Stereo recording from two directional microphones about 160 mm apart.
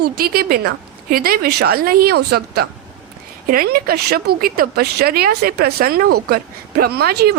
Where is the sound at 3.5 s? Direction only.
65° right (ahead or behind).